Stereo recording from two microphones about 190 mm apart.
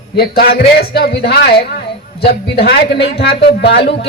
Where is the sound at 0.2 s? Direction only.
55° left (ahead or behind).